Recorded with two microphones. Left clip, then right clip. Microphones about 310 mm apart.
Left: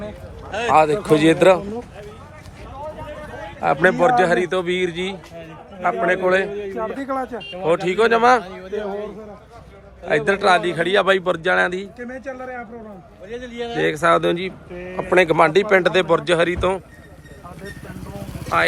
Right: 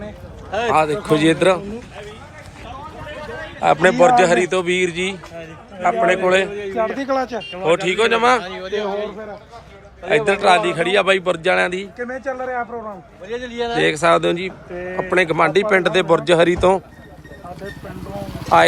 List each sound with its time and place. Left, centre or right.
0.7 s speech: centre
3.6 s a man's voice: centre
6.7 s a man's voice: right
7.6 s a man's voice: centre
8.4 s speech: centre
8.7 s a man's voice: right
10.1 s a man's voice: centre
13.2 s a man's voice: right
13.7 s a man's voice: centre
14.7 s a man's voice: right
15.1 s speech: centre